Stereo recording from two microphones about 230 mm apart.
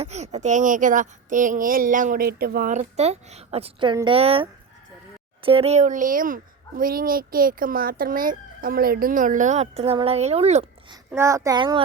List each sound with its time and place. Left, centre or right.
0.0 s speech: right
11.1 s a child's voice: centre